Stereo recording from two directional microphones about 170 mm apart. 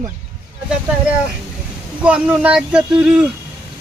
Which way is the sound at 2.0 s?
5° right (ahead or behind).